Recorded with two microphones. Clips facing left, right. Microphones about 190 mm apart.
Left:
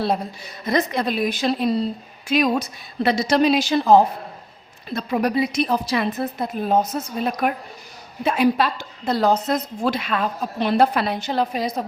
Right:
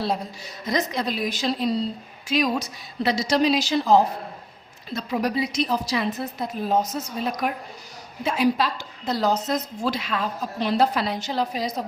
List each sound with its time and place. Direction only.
0.0 s a woman's voice: 55° left (ahead or behind)